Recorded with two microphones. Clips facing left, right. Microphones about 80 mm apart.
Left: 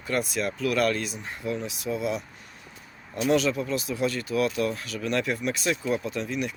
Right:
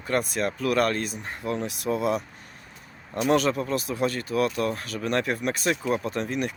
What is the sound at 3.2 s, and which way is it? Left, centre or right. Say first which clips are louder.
Speech: right 1 dB; right.